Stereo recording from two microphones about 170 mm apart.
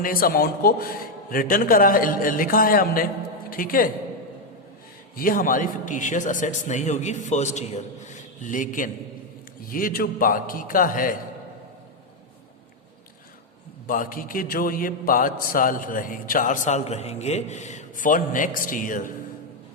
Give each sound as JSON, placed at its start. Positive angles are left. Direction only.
{"t": 0.0, "sound": "a man's voice", "side_deg": 55}
{"t": 5.1, "sound": "a man's voice", "side_deg": 55}
{"t": 13.8, "sound": "a man's voice", "side_deg": 55}